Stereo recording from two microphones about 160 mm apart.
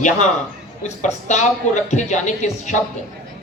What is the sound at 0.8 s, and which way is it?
Speech, 45° left (ahead or behind).